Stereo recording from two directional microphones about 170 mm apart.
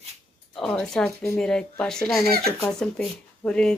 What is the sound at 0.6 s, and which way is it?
A woman's voice, 5° left (ahead or behind).